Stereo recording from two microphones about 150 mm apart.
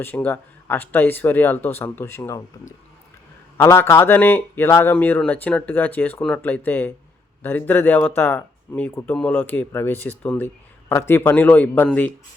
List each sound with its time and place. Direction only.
0.0 s a man's voice: 15° left (ahead or behind)